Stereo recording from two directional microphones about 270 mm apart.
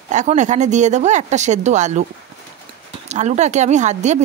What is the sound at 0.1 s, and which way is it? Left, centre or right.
Speech, right.